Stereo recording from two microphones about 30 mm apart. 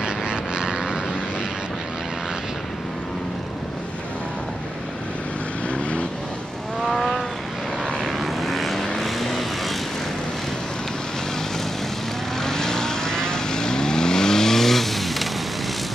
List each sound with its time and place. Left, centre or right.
0.0 s vehicle: right
6.8 s vehicle: centre
12.4 s vehicle: centre